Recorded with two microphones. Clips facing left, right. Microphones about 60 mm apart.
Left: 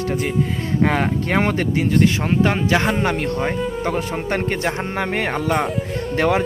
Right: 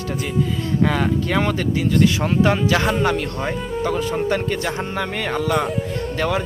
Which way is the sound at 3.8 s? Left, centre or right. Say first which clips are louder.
Right 2 dB; left.